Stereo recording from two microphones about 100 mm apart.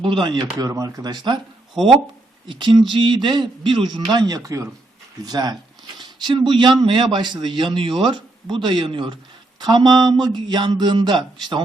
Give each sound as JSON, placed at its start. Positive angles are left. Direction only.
{"t": 0.0, "sound": "a man's voice", "side_deg": -55}
{"t": 0.6, "sound": "speech", "side_deg": -35}
{"t": 2.5, "sound": "a man's voice", "side_deg": -55}
{"t": 4.1, "sound": "a man's voice", "side_deg": -45}
{"t": 4.4, "sound": "a man's voice", "side_deg": -30}
{"t": 9.6, "sound": "a man's voice", "side_deg": -45}